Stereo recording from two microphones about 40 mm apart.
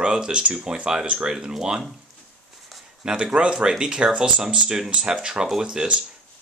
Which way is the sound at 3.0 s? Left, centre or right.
Centre.